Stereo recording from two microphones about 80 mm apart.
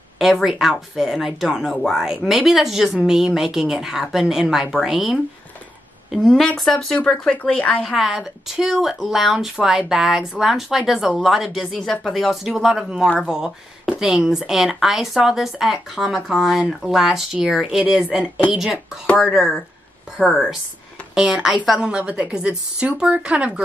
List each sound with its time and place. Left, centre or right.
0.2 s speech: centre
7.8 s a woman's voice: centre